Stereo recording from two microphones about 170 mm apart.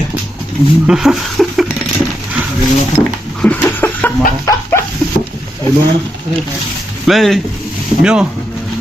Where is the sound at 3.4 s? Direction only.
10° left (ahead or behind).